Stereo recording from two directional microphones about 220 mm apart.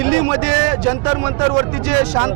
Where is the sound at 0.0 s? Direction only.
15° right (ahead or behind).